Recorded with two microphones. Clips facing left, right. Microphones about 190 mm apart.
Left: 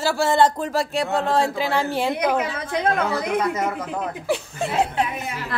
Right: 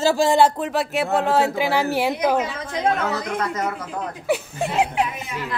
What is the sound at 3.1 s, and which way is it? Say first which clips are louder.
Speech: left 3 dB; 10° left (ahead or behind).